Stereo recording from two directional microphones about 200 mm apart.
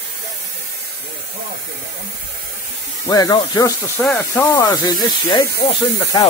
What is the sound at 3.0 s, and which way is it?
Speech, 15° left (ahead or behind).